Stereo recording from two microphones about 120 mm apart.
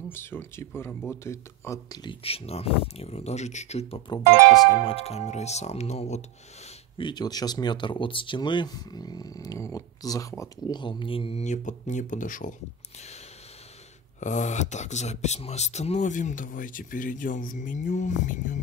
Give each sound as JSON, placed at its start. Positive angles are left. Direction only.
{"t": 0.1, "sound": "speech", "side_deg": 20}
{"t": 2.0, "sound": "speech", "side_deg": 55}
{"t": 7.0, "sound": "speech", "side_deg": 40}
{"t": 10.8, "sound": "speech", "side_deg": 45}
{"t": 11.4, "sound": "speech", "side_deg": 85}
{"t": 14.2, "sound": "speech", "side_deg": 90}